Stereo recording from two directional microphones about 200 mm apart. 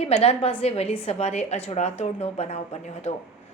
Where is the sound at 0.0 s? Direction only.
30° left (ahead or behind).